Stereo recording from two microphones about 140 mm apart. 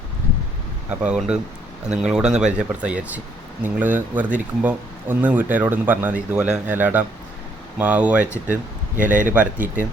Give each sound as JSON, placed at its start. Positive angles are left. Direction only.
{"t": 0.9, "sound": "speech", "side_deg": -10}
{"t": 9.0, "sound": "a man's voice", "side_deg": -65}
{"t": 9.3, "sound": "speech", "side_deg": -10}